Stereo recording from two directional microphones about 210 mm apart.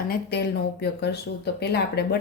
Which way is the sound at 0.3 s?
50° left (ahead or behind).